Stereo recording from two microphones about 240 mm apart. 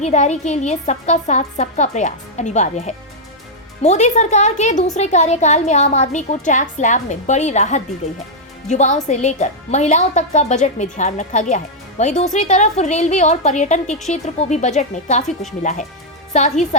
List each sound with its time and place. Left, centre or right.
0.0 s speech: left